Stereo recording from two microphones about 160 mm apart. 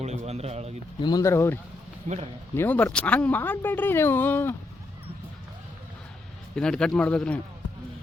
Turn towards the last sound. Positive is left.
turn(degrees=5)  # may be behind; listen again after turning